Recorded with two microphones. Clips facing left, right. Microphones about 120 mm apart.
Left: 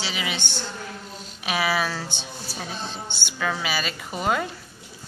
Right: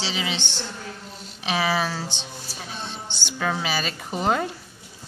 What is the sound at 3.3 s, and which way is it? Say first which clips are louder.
A woman's voice: right 1 dB; 30° right (ahead or behind).